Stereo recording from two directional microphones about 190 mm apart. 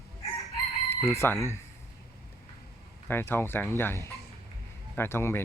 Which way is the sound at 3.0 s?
10° left (ahead or behind).